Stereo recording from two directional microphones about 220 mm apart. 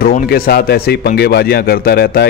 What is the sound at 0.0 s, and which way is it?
A man's voice, 45° left (ahead or behind).